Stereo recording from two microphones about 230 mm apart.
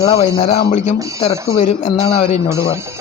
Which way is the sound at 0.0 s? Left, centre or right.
Left.